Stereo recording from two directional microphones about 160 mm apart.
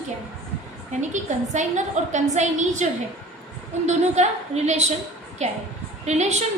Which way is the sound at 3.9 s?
45° right (ahead or behind).